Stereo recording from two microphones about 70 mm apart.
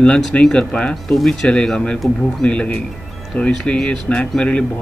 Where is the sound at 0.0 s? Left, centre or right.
Centre.